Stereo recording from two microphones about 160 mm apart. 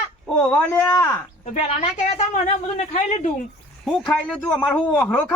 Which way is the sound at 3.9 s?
5° left (ahead or behind).